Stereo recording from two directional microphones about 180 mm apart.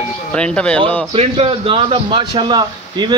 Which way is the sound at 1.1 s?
30° right (ahead or behind).